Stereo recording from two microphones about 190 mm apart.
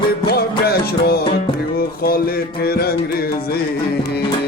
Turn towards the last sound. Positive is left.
turn(degrees=55)  # may be behind; listen again after turning